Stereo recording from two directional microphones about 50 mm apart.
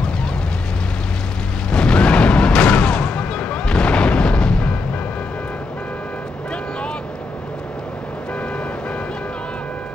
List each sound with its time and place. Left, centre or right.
1.7 s artillery fire: centre